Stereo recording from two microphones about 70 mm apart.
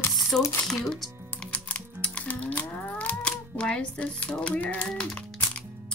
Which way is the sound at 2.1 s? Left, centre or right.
Left.